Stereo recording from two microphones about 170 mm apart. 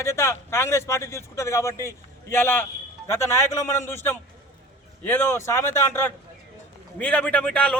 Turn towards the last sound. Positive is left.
turn(degrees=5)  # may be behind; listen again after turning